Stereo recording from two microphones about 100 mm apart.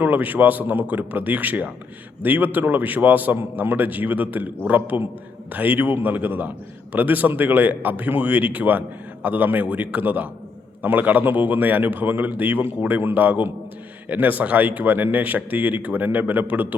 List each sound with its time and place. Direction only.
0.0 s a man's voice: 15° right (ahead or behind)